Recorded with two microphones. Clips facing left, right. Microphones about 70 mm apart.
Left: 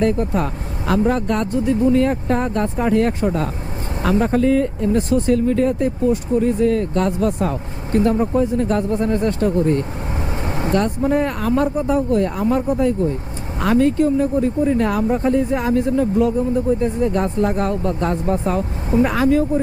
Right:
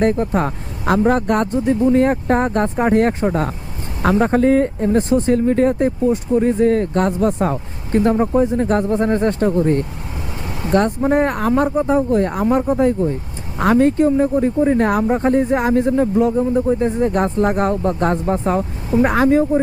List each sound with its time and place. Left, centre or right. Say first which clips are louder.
0.0 s speech: right 2 dB; right
11.0 s speech: right 2 dB; right
12.5 s speech: right 3 dB; right